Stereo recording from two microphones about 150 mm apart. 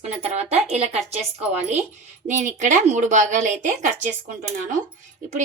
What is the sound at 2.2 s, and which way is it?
A woman's voice, 55° right (ahead or behind).